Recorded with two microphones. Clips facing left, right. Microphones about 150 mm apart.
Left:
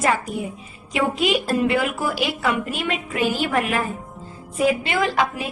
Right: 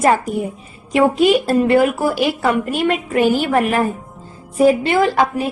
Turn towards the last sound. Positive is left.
turn(degrees=-40)  # may be behind; listen again after turning